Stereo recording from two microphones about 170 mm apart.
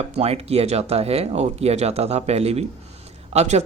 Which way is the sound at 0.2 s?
35° right (ahead or behind).